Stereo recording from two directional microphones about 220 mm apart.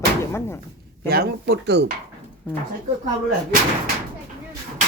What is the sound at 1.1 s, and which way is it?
Speech, 45° right (ahead or behind).